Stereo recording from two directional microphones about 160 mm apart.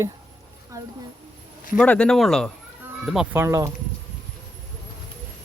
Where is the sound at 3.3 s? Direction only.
15° right (ahead or behind).